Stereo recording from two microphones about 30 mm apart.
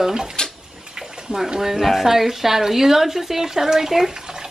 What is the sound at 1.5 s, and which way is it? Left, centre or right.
A woman's voice, centre.